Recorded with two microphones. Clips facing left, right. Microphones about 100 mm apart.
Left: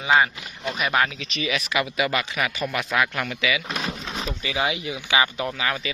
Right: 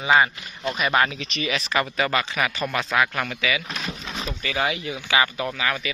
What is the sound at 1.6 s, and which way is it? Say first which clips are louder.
Speech: right 1 dB; 35° right (ahead or behind).